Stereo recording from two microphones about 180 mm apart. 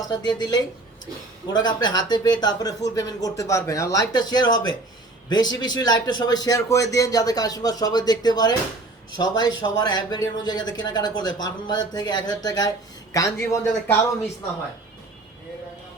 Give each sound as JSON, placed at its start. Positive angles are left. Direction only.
{"t": 0.0, "sound": "speech", "side_deg": 20}